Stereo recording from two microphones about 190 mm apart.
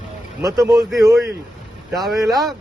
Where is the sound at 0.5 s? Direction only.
15° right (ahead or behind).